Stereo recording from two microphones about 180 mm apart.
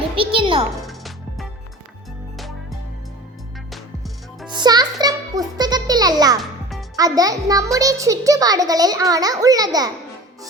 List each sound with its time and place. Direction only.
0.2 s a child's voice: 30° right (ahead or behind)
0.9 s music: centre (ahead or behind)
4.4 s music: 25° right (ahead or behind)
6.4 s music: centre (ahead or behind)
6.9 s a child's voice: 20° right (ahead or behind)